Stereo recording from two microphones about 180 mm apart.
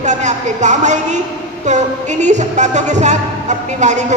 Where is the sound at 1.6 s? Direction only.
40° right (ahead or behind).